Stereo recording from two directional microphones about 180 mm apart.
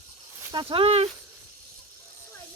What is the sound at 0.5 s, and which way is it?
Speech, 30° right (ahead or behind).